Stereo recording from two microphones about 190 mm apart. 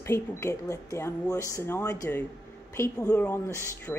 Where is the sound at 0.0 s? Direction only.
15° left (ahead or behind).